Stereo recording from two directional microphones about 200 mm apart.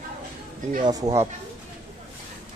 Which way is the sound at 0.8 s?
15° right (ahead or behind).